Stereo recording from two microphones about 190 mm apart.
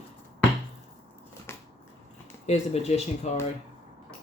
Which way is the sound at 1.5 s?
10° left (ahead or behind).